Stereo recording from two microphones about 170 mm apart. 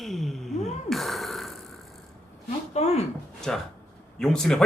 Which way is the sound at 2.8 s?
40° left (ahead or behind).